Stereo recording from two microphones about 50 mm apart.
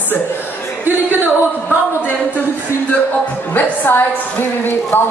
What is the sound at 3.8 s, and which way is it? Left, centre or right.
A woman's voice, left.